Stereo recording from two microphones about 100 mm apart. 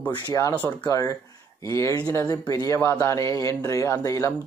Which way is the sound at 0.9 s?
35° left (ahead or behind).